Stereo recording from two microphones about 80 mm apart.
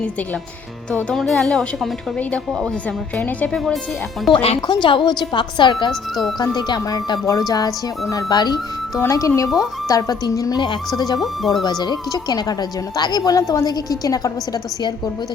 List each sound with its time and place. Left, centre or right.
1.1 s a woman's voice: centre
3.2 s speech: centre
4.3 s a woman's voice: left
6.4 s speech: left
7.3 s a woman's voice: left
9.0 s a woman's voice: left
11.8 s a woman's voice: left